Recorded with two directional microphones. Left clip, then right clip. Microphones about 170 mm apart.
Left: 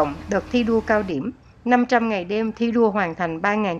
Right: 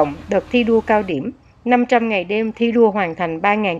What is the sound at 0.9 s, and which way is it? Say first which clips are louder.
Speech: right 4 dB; 10° right (ahead or behind).